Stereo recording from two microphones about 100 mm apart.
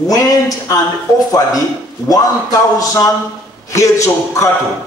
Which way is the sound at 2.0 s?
40° left (ahead or behind).